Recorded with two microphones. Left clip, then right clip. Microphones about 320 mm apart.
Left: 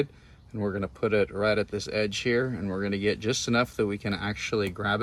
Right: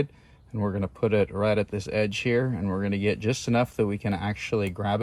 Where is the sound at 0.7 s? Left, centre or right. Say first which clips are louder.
Right 1 dB; right.